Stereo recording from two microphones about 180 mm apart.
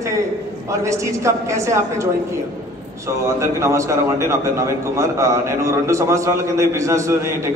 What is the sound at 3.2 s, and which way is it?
A man's voice, 15° right (ahead or behind).